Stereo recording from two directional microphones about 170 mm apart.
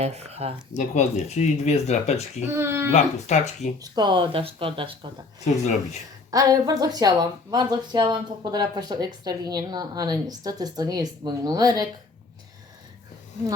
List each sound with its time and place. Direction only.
0.0 s speech: 40° right (ahead or behind)
0.8 s speech: 45° left (ahead or behind)
2.5 s speech: 15° right (ahead or behind)
2.9 s speech: 45° left (ahead or behind)
3.8 s speech: 25° right (ahead or behind)
6.3 s speech: 20° right (ahead or behind)